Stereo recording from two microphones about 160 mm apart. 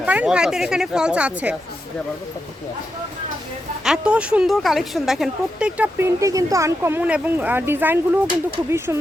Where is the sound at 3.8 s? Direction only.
5° right (ahead or behind).